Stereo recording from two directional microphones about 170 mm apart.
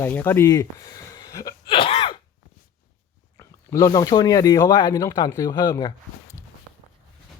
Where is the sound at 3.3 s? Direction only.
15° left (ahead or behind).